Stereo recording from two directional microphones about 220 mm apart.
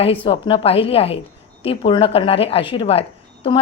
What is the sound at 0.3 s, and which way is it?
A woman's voice, 25° left (ahead or behind).